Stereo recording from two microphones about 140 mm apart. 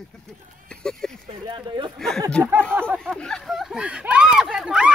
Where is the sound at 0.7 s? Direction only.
5° left (ahead or behind).